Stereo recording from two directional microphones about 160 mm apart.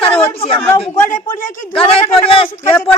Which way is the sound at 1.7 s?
35° left (ahead or behind).